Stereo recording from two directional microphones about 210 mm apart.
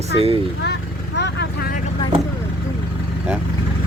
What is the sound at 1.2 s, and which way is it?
Vehicle, 50° left (ahead or behind).